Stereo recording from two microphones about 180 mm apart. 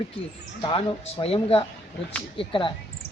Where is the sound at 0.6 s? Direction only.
30° left (ahead or behind).